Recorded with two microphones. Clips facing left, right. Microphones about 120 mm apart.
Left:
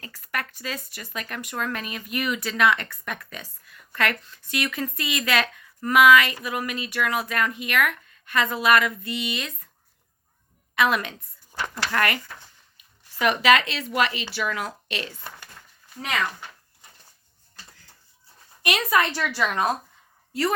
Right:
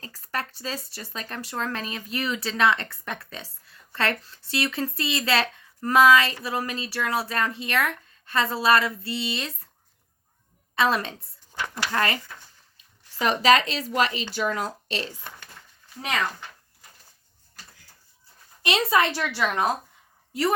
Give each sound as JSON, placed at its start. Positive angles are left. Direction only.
{"t": 0.0, "sound": "speech", "side_deg": -30}
{"t": 10.8, "sound": "speech", "side_deg": -30}
{"t": 13.1, "sound": "speech", "side_deg": -35}
{"t": 15.2, "sound": "speech", "side_deg": 10}
{"t": 18.6, "sound": "speech", "side_deg": -25}